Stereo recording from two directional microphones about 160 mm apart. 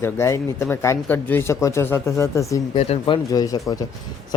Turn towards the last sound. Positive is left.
turn(degrees=25)  # may be behind; listen again after turning